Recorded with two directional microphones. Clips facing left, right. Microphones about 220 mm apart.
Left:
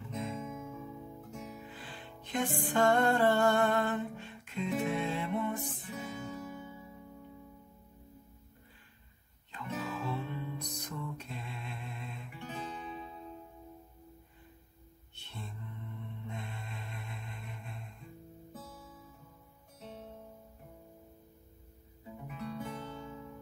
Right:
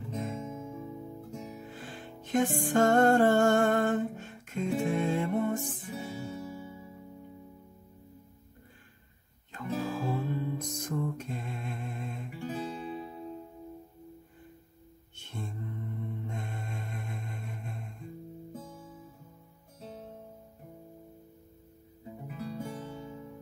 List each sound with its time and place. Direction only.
0.3 s guitar: 30° right (ahead or behind)
1.7 s music: 45° right (ahead or behind)
5.9 s music: 35° right (ahead or behind)
9.5 s music: 45° right (ahead or behind)
15.1 s mantra: 45° right (ahead or behind)
18.5 s guitar: 10° right (ahead or behind)
22.3 s music: 35° right (ahead or behind)